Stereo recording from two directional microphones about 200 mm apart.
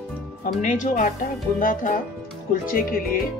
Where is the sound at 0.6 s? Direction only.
40° left (ahead or behind).